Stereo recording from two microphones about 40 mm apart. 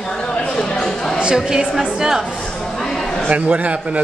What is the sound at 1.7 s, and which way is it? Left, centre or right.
Speech, centre.